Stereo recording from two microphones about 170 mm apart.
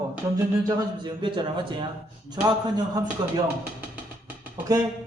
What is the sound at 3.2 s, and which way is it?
Speech, 25° right (ahead or behind).